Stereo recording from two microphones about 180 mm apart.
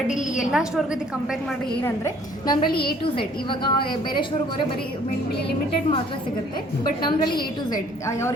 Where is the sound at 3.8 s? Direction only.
55° left (ahead or behind).